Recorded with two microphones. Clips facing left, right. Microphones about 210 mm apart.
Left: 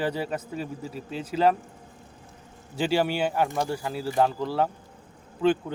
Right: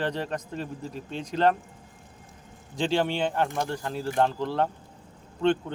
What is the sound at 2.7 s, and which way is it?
A man's voice, 10° left (ahead or behind).